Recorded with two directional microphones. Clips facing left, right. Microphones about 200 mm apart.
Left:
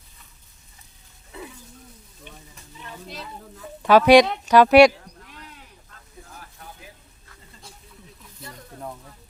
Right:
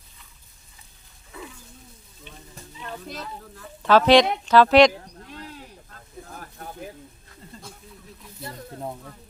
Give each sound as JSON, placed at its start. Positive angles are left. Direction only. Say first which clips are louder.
{"t": 3.6, "sound": "speech", "louder": "left 2 dB", "side_deg": 10}
{"t": 5.0, "sound": "a sound", "louder": "right 5 dB", "side_deg": -35}
{"t": 6.2, "sound": "sizzle", "louder": "right 5 dB", "side_deg": -50}